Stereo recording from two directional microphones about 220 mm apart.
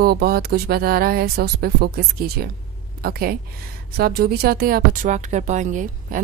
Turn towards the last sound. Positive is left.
turn(degrees=-35)  # may be behind; listen again after turning